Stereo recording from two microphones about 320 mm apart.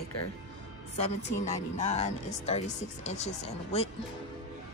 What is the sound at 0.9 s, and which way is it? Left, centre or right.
Speech, left.